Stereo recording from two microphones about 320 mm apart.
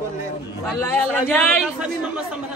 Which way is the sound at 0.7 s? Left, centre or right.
Centre.